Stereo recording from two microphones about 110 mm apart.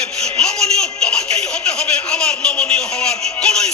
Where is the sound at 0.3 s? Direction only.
5° left (ahead or behind).